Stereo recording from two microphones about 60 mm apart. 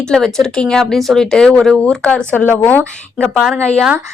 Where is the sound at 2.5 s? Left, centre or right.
Left.